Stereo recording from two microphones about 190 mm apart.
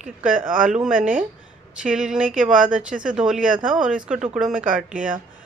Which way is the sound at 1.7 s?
5° right (ahead or behind).